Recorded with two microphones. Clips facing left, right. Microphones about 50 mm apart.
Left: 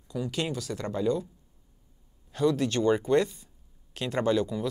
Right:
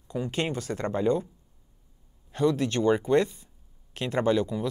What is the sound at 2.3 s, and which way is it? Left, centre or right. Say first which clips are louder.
Speech: right 1 dB; right.